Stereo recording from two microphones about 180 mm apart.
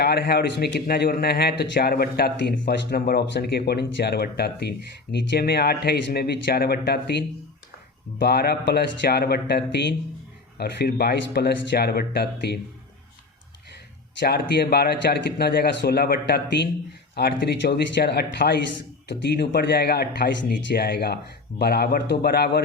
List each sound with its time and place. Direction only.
0.0 s speech: 65° left (ahead or behind)
14.2 s speech: 65° left (ahead or behind)
20.5 s speech: 70° left (ahead or behind)